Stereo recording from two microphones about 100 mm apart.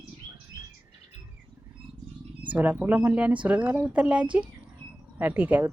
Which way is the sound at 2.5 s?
15° right (ahead or behind).